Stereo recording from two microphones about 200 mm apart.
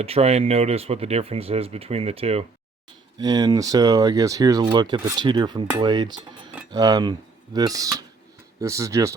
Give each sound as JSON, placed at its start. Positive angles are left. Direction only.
{"t": 0.0, "sound": "speech", "side_deg": -30}
{"t": 3.2, "sound": "speech", "side_deg": -20}